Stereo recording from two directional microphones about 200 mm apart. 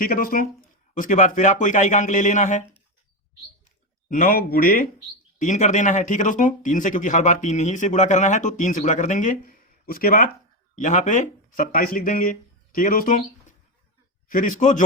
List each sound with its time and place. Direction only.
0.0 s speech: 45° left (ahead or behind)
4.1 s speech: 45° left (ahead or behind)
14.3 s speech: 40° left (ahead or behind)